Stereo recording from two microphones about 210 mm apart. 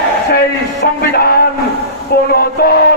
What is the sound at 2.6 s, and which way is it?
Speech, 45° left (ahead or behind).